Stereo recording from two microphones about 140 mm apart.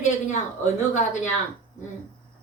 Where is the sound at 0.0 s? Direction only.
60° left (ahead or behind).